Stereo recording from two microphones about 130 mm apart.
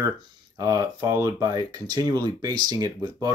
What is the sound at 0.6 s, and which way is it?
Speech, 25° right (ahead or behind).